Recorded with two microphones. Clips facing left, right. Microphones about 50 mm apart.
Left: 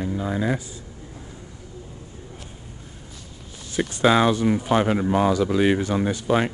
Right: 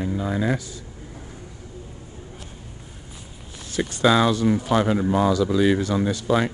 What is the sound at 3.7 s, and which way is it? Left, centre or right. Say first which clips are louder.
Speech: even; left.